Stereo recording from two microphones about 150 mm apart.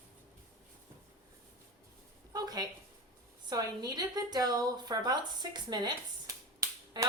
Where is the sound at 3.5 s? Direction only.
25° right (ahead or behind).